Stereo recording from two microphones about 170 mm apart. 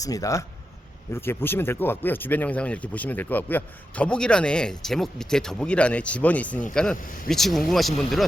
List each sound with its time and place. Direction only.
0.0 s a man's voice: 20° left (ahead or behind); by 8.3 s centre (ahead or behind)